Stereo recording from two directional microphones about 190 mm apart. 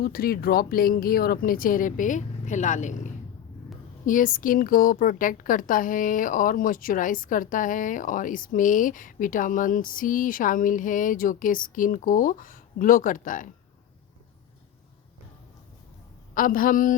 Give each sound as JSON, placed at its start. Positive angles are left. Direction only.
{"t": 0.0, "sound": "speech", "side_deg": 50}
{"t": 16.3, "sound": "speech", "side_deg": 45}